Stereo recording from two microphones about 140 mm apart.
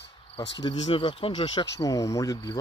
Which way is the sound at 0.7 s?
40° left (ahead or behind).